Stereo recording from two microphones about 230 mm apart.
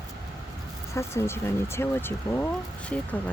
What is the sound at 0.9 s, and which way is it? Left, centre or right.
Speech, centre.